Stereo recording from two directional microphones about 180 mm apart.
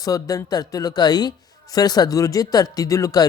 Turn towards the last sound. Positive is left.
turn(degrees=20)  # may be behind; listen again after turning